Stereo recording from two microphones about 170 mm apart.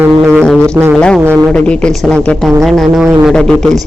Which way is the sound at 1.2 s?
15° right (ahead or behind).